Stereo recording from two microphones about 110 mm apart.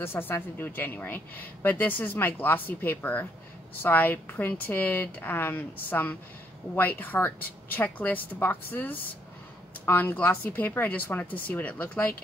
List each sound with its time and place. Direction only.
0.0 s speech: 20° left (ahead or behind)